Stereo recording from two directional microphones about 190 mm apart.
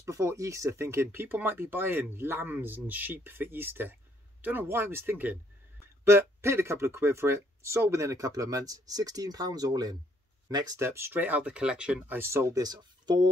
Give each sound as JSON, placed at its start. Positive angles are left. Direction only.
{"t": 0.0, "sound": "speech", "side_deg": -15}